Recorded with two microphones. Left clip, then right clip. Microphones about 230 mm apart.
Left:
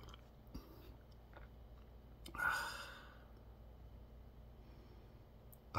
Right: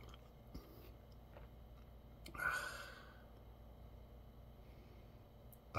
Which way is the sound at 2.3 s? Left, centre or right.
Centre.